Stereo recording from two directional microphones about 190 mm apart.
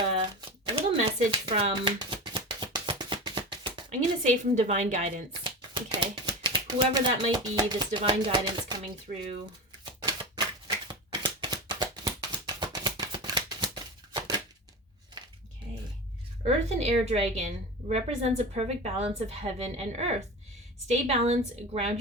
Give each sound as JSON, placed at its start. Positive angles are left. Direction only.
{"t": 0.2, "sound": "a sound", "side_deg": -30}
{"t": 4.2, "sound": "a woman's voice", "side_deg": -35}
{"t": 5.3, "sound": "speech", "side_deg": -25}
{"t": 9.1, "sound": "a woman's voice", "side_deg": -40}
{"t": 9.8, "sound": "typewriter", "side_deg": -25}
{"t": 10.8, "sound": "shuffling cards", "side_deg": -25}
{"t": 14.1, "sound": "a sound", "side_deg": -20}
{"t": 16.4, "sound": "a woman's voice", "side_deg": -35}